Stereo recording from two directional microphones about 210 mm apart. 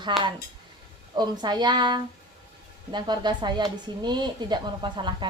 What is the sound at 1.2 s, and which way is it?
A woman's voice, 20° right (ahead or behind).